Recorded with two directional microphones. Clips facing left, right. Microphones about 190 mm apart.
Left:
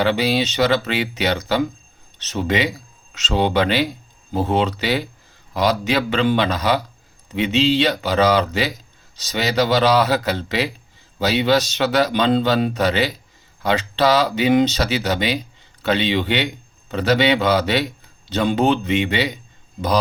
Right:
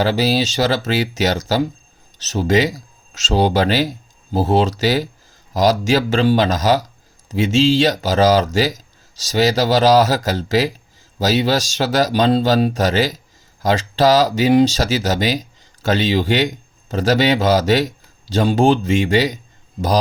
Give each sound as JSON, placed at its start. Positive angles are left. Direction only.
{"t": 0.0, "sound": "speech", "side_deg": -40}